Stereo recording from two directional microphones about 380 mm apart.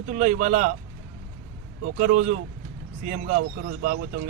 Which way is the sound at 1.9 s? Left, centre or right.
Right.